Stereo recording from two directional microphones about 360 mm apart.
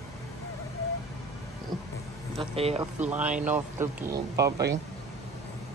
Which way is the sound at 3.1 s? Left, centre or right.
Centre.